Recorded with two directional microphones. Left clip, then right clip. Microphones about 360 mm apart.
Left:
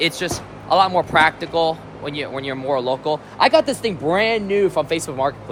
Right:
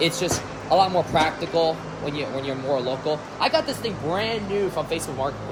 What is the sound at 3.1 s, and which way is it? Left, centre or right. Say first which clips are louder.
Speech: left 8 dB; left.